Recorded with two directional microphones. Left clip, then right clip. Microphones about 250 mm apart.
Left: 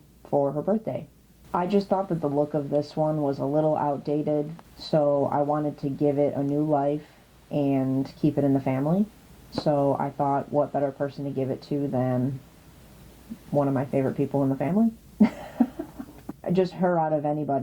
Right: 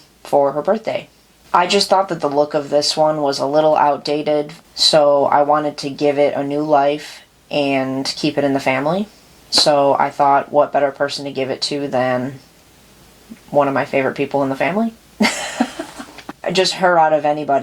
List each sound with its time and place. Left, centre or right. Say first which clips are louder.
0.3 s speech: right 10 dB; centre
5.0 s speech: right 11 dB; right
6.8 s speech: right 9 dB; centre
13.6 s speech: right 10 dB; centre
14.3 s a sound: right 9 dB; centre